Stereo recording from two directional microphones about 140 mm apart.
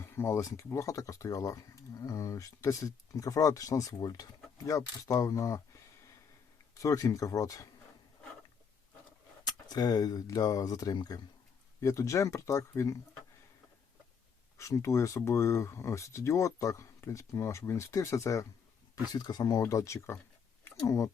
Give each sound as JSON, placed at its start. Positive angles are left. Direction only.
{"t": 0.2, "sound": "speech", "side_deg": 20}
{"t": 6.7, "sound": "speech", "side_deg": 25}
{"t": 9.4, "sound": "speech", "side_deg": 30}
{"t": 14.6, "sound": "speech", "side_deg": 20}